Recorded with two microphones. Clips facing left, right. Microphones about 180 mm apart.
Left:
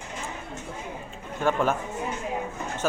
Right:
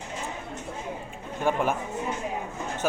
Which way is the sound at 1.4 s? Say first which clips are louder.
Left 1 dB; 15° right (ahead or behind).